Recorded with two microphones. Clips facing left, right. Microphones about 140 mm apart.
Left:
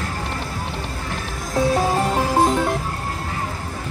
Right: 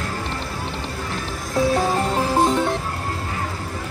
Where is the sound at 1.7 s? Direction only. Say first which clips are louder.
Left 1 dB; centre (ahead or behind).